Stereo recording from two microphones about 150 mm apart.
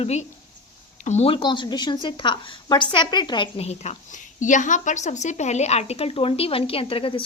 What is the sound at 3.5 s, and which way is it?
A woman's voice, 45° left (ahead or behind).